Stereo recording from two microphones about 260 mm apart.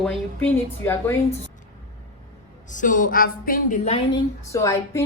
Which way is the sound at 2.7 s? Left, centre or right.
Left.